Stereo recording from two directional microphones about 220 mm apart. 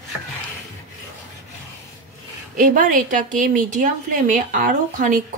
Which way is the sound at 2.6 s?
35° right (ahead or behind).